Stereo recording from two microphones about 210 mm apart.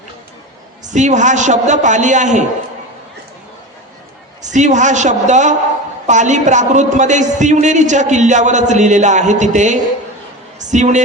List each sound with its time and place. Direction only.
0.9 s a man's voice: 35° right (ahead or behind)
4.5 s a man's voice: 35° right (ahead or behind)